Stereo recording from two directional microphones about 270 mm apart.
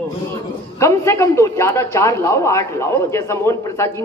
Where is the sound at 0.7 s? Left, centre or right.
Centre.